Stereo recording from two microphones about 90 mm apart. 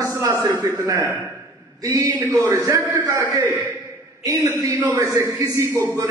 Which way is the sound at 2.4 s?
25° left (ahead or behind).